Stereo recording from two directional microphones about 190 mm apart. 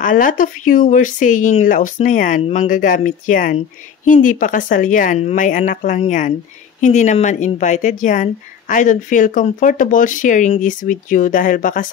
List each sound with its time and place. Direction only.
0.0 s speech: 45° left (ahead or behind)